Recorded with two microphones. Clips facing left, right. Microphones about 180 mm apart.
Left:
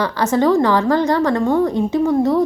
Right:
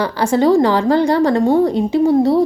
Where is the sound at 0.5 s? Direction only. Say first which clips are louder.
Right 2 dB; 10° right (ahead or behind).